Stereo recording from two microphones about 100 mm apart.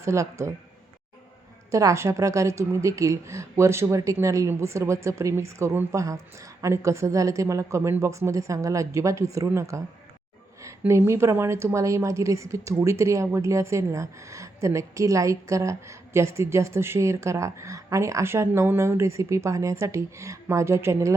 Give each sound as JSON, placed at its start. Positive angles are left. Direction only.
{"t": 0.0, "sound": "a woman's voice", "side_deg": -30}
{"t": 1.7, "sound": "a woman's voice", "side_deg": -30}